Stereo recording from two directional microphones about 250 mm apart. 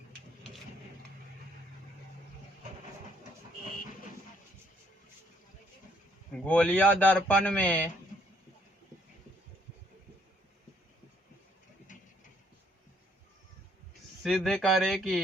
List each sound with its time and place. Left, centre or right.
6.4 s speech: centre
14.3 s speech: centre